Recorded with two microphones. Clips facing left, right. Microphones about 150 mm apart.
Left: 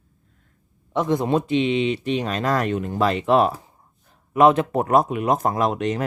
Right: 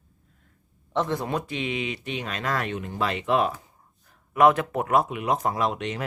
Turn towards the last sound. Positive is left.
turn(degrees=40)  # may be behind; listen again after turning